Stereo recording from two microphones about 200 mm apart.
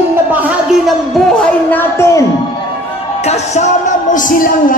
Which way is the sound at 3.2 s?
35° left (ahead or behind).